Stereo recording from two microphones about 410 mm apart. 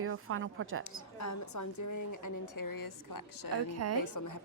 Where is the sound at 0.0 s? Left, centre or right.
Right.